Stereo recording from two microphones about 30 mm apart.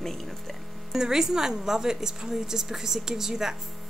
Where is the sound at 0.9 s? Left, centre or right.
Centre.